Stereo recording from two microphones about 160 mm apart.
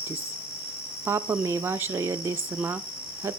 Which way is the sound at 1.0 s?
15° right (ahead or behind).